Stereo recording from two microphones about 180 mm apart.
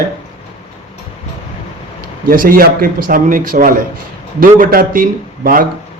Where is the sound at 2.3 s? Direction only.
50° right (ahead or behind).